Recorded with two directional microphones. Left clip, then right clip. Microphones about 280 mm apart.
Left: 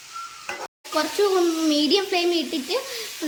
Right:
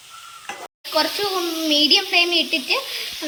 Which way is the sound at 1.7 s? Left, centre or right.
Centre.